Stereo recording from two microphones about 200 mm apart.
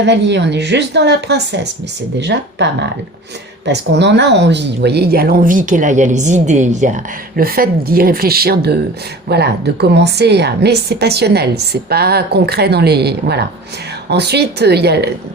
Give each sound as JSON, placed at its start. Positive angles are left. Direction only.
{"t": 0.0, "sound": "a woman's voice", "side_deg": -60}
{"t": 3.7, "sound": "a woman's voice", "side_deg": -60}